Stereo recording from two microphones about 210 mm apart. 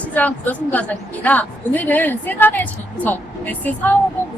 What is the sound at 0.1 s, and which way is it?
A woman's voice, 10° left (ahead or behind).